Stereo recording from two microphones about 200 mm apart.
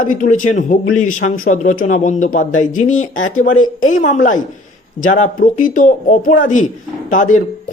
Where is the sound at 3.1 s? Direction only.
75° left (ahead or behind).